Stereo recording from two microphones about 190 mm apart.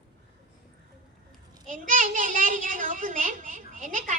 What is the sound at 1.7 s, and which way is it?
A child's voice, 45° right (ahead or behind).